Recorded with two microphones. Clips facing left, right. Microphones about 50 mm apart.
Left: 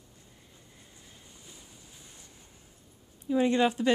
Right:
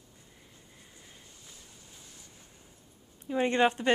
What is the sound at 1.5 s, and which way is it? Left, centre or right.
Waves, centre.